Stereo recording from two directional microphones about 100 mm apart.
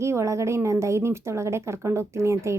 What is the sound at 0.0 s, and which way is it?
Speech, 30° right (ahead or behind).